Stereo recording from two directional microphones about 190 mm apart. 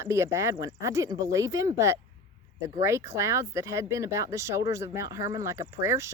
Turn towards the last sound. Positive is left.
turn(degrees=-15)  # may be behind; listen again after turning